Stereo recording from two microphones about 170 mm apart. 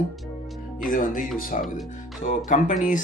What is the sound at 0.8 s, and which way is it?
Speech, 55° left (ahead or behind).